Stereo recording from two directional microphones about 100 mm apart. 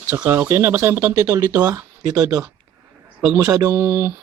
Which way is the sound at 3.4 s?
40° right (ahead or behind).